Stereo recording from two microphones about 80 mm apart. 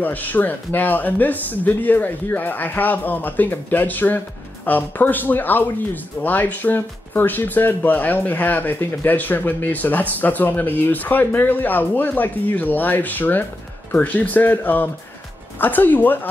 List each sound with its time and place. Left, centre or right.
0.0 s speech: left